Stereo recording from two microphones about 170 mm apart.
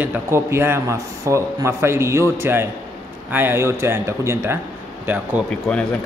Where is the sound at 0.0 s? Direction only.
15° right (ahead or behind).